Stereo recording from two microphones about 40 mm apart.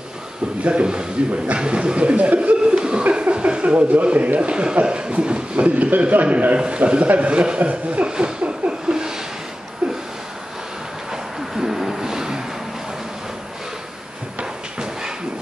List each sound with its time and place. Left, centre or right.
0.7 s a man's voice: right
2.6 s chuckle: right
3.0 s a man's voice: right
5.8 s a man's voice: right
8.1 s a sound: right
11.1 s a sound: centre
14.4 s music: centre